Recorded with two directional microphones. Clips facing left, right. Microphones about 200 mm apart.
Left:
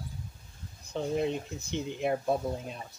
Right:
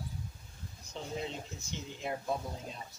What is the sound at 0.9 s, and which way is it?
Speech, 60° left (ahead or behind).